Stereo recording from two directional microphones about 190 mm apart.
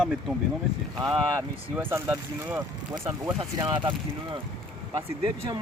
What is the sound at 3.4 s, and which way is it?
Speech, 25° right (ahead or behind).